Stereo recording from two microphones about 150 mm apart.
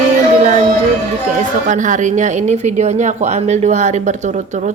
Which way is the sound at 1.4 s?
55° right (ahead or behind).